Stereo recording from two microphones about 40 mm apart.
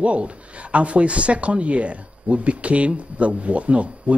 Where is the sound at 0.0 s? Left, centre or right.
Right.